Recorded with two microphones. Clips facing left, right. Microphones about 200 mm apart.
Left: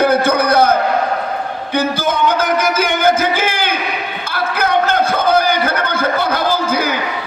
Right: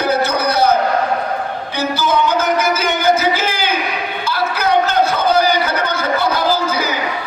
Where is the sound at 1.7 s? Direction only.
55° left (ahead or behind).